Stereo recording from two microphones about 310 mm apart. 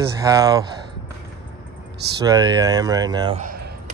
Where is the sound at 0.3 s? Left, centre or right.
Centre.